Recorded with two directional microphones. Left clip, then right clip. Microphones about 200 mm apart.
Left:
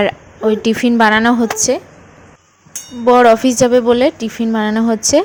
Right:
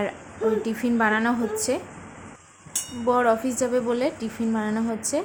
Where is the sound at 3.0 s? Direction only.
35° left (ahead or behind).